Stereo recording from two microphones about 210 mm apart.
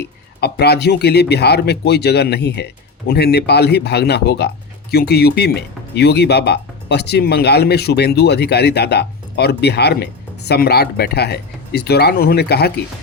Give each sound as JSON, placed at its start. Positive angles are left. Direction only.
{"t": 0.0, "sound": "speech", "side_deg": 50}